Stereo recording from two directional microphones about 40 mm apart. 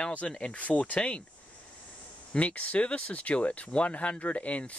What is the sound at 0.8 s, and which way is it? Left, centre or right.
Speech, left.